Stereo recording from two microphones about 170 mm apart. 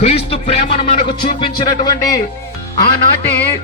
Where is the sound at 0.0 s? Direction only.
35° left (ahead or behind).